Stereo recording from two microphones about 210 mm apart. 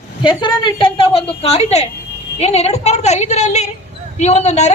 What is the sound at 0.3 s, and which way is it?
A woman's voice, 25° left (ahead or behind).